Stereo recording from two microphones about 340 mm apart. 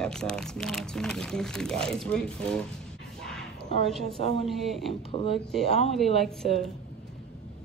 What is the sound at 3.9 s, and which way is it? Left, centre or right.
Speech, centre.